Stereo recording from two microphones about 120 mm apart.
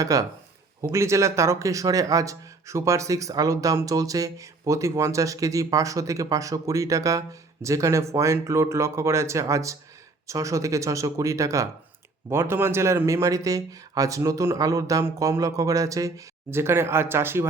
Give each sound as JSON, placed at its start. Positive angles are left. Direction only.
{"t": 0.0, "sound": "speech", "side_deg": -30}